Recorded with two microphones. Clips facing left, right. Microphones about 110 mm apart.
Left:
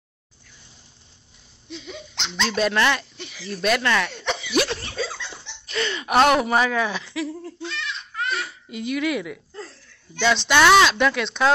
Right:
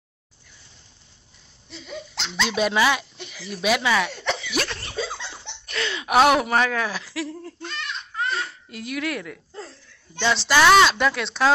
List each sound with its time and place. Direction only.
1.7 s speech: centre (ahead or behind)
5.7 s speech: centre (ahead or behind)
7.6 s goat: 45° right (ahead or behind)
8.3 s speech: 5° left (ahead or behind)